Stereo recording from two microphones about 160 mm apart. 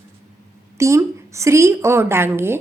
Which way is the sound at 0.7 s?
20° right (ahead or behind).